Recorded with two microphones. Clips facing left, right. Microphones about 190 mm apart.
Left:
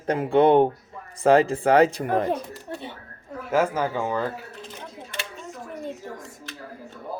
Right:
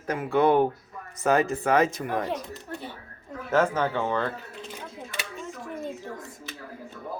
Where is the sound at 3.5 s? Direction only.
10° left (ahead or behind).